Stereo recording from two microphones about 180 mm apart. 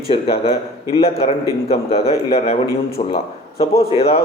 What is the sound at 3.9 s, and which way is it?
Speech, 35° left (ahead or behind).